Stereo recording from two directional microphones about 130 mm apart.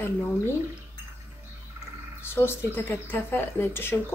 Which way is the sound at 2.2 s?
20° left (ahead or behind).